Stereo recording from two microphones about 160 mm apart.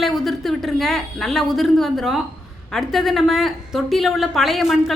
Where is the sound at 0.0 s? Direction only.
Centre (ahead or behind).